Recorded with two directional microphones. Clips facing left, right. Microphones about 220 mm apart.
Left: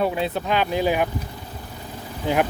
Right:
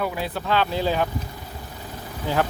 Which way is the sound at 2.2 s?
15° left (ahead or behind).